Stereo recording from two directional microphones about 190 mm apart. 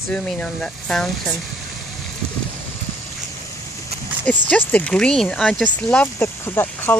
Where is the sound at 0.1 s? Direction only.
5° left (ahead or behind).